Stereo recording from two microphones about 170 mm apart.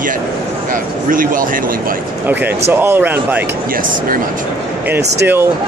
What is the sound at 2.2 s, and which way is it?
Speech, 10° right (ahead or behind).